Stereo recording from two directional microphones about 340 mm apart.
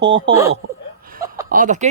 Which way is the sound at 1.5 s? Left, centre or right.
Right.